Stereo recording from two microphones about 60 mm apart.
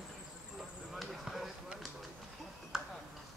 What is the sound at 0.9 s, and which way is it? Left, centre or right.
Basketball bounce, centre.